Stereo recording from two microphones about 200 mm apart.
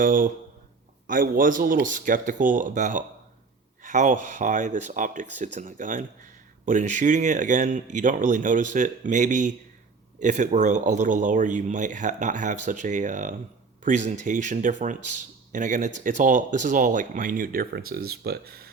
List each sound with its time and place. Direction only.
0.0 s speech: 45° right (ahead or behind)